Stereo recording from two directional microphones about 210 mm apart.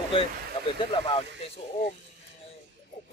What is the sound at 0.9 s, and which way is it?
Speech, 20° left (ahead or behind).